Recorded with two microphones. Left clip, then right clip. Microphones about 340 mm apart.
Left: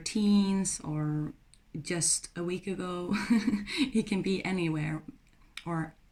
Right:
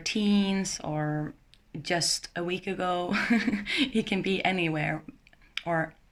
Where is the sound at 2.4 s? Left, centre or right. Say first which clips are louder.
Right 2 dB; centre.